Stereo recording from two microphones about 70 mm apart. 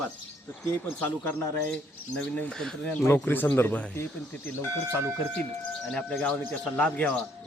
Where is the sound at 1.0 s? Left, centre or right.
Left.